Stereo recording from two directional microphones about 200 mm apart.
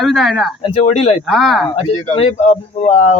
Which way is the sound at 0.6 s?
30° left (ahead or behind).